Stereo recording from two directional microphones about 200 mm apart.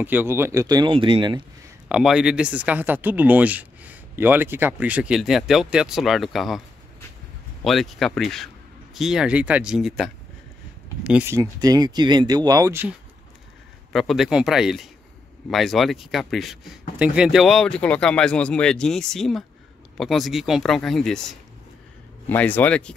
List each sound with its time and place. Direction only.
0.0 s speech: 10° right (ahead or behind); by 1.4 s 25° right (ahead or behind)
1.9 s speech: 5° right (ahead or behind)
7.6 s speech: centre (ahead or behind); by 12.8 s 20° right (ahead or behind)
13.9 s speech: centre (ahead or behind)